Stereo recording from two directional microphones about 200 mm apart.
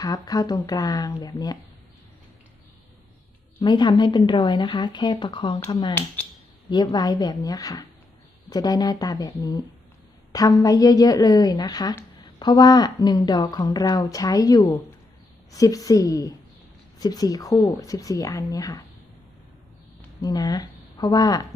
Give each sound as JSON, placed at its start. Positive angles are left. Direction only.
{"t": 0.0, "sound": "a woman's voice", "side_deg": 20}
{"t": 3.6, "sound": "a woman's voice", "side_deg": 20}
{"t": 6.7, "sound": "a woman's voice", "side_deg": 20}
{"t": 20.2, "sound": "speech", "side_deg": 20}